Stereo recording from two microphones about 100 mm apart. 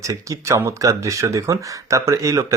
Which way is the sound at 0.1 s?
30° right (ahead or behind).